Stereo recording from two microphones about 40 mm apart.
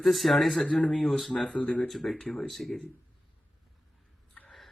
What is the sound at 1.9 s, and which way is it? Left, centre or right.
Speech, centre.